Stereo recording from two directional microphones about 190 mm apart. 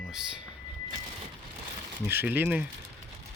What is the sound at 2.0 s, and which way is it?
Speech, 10° right (ahead or behind).